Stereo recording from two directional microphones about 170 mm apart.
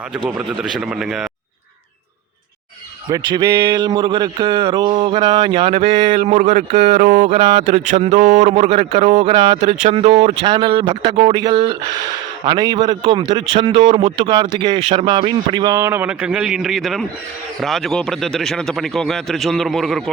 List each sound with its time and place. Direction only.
0.3 s speech: 5° right (ahead or behind)
3.1 s a man's voice: 25° right (ahead or behind)
6.3 s a man's voice: 50° right (ahead or behind); by 20.1 s centre (ahead or behind)